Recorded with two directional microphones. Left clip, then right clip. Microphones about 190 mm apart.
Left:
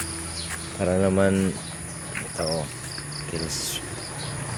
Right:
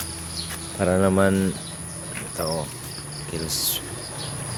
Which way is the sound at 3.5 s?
5° right (ahead or behind).